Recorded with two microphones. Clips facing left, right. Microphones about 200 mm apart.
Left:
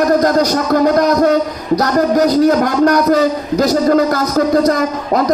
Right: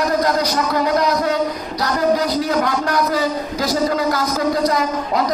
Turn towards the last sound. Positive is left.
turn(degrees=50)  # may be behind; listen again after turning